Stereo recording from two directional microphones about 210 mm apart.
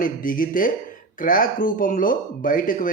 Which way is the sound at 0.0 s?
40° left (ahead or behind).